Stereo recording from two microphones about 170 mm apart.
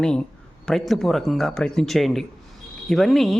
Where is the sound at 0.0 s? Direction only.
5° left (ahead or behind).